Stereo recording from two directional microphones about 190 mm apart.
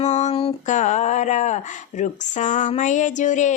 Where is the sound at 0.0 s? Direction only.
40° left (ahead or behind).